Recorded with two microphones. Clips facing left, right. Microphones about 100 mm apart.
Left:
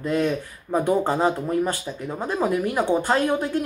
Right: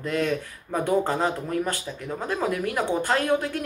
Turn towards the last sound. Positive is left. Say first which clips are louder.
# left 2 dB
turn(degrees=20)  # may be behind; listen again after turning